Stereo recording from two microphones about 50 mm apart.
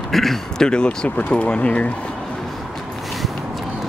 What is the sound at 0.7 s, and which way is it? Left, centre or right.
Speech, centre.